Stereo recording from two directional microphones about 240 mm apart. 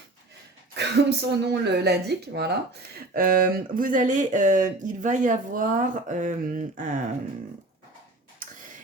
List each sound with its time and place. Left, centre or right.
0.8 s speech: right